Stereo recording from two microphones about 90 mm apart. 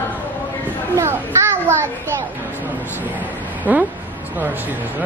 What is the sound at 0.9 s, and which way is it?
Speech, 30° right (ahead or behind).